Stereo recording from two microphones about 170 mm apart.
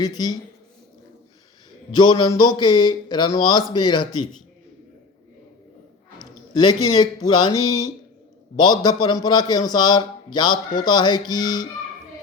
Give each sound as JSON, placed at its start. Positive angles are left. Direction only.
{"t": 0.0, "sound": "a man's voice", "side_deg": 25}
{"t": 2.0, "sound": "a man's voice", "side_deg": 30}
{"t": 6.5, "sound": "a man's voice", "side_deg": 25}